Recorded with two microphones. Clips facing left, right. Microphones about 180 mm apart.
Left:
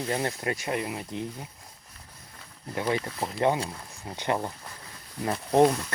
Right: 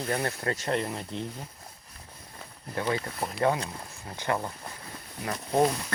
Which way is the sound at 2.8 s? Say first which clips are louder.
Left 1 dB; 20° left (ahead or behind).